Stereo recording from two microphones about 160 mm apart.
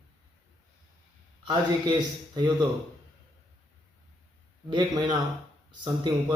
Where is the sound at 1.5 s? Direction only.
25° right (ahead or behind).